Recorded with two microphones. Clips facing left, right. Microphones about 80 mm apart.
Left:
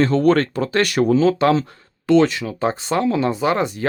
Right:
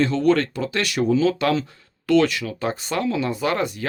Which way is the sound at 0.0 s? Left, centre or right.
Left.